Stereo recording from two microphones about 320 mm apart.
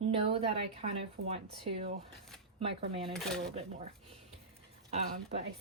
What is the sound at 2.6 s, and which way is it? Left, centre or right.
Speech, centre.